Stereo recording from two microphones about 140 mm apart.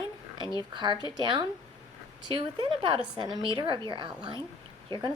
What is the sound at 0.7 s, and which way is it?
A woman's voice, 35° right (ahead or behind).